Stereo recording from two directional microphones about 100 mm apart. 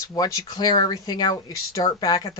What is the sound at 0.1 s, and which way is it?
Speech, 40° left (ahead or behind).